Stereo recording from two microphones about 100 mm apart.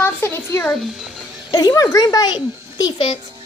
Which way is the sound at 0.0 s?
25° left (ahead or behind).